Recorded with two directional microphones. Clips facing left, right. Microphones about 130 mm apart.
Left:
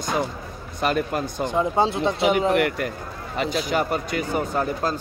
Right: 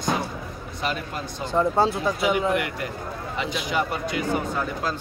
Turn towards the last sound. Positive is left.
turn(degrees=50)  # may be behind; listen again after turning